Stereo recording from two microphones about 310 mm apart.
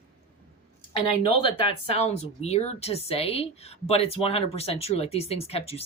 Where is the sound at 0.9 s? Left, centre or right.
Centre.